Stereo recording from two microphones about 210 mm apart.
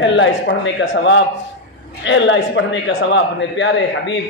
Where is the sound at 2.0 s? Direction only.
60° left (ahead or behind).